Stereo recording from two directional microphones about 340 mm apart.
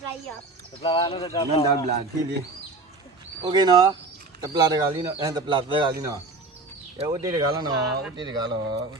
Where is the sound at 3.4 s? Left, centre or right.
Centre.